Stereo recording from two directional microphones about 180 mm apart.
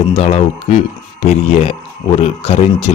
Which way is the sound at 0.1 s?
35° left (ahead or behind).